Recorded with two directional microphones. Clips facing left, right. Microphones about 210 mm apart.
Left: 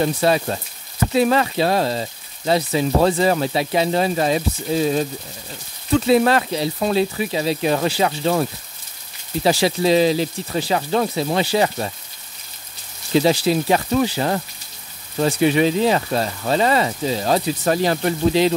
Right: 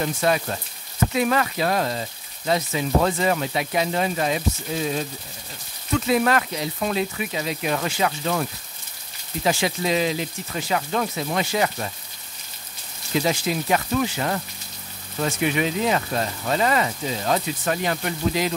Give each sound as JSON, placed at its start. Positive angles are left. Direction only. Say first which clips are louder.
{"t": 0.0, "sound": "speech", "louder": "left 4 dB", "side_deg": 30}
{"t": 5.9, "sound": "speech", "louder": "left 5 dB", "side_deg": 30}
{"t": 13.1, "sound": "speech", "louder": "left 7 dB", "side_deg": 30}